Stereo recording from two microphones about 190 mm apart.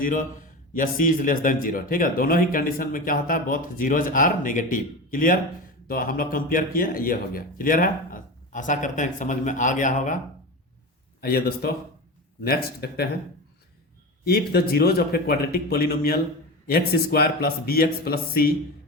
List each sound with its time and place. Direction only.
0.0 s a man's voice: 45° left (ahead or behind)
11.2 s a man's voice: 55° left (ahead or behind)
14.3 s a man's voice: 55° left (ahead or behind)